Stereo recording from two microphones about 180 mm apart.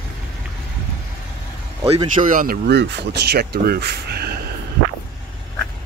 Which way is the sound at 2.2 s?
50° right (ahead or behind).